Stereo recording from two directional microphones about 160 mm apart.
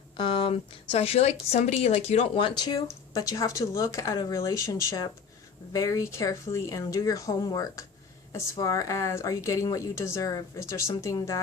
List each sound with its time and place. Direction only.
0.2 s a woman's voice: 30° left (ahead or behind)